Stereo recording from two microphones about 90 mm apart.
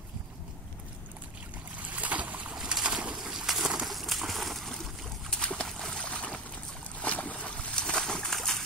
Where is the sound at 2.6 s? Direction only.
5° right (ahead or behind).